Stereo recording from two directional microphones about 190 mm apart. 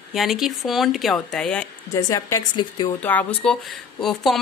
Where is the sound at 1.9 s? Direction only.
15° left (ahead or behind).